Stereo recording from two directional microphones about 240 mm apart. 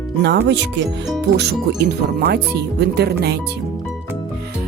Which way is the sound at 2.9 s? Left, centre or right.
Right.